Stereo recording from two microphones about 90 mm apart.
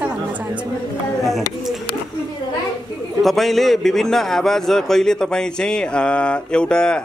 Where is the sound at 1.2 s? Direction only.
Centre (ahead or behind).